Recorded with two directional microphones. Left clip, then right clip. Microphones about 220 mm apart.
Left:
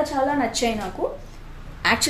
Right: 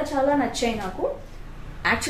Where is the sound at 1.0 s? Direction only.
35° left (ahead or behind).